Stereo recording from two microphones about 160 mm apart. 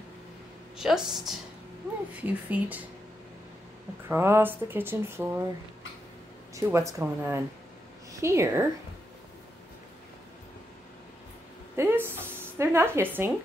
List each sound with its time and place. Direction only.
0.7 s a woman's voice: 5° right (ahead or behind)
4.1 s speech: 15° right (ahead or behind)
6.5 s speech: 20° right (ahead or behind)
11.7 s a sound: 15° right (ahead or behind)